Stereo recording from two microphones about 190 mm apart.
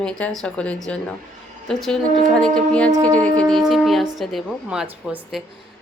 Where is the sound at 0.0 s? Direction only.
5° left (ahead or behind).